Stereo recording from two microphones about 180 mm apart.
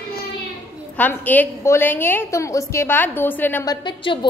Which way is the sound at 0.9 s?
10° left (ahead or behind).